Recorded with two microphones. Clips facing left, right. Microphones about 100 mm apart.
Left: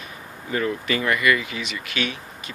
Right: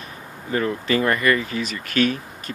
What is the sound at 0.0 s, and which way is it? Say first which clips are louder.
Speech: right 1 dB; 35° right (ahead or behind).